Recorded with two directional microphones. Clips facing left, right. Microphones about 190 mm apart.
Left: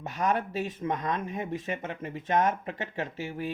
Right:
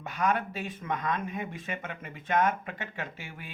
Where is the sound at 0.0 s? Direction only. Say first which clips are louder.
Left 1 dB; 40° left (ahead or behind).